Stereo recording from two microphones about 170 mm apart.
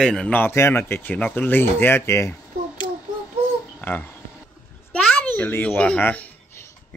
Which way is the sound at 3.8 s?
10° left (ahead or behind).